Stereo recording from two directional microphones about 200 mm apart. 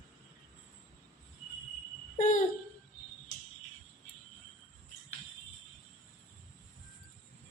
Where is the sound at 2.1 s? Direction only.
40° left (ahead or behind).